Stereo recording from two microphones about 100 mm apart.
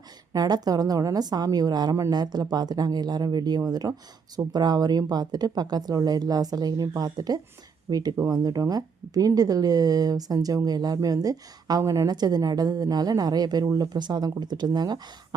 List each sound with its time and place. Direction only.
0.3 s speech: 40° right (ahead or behind)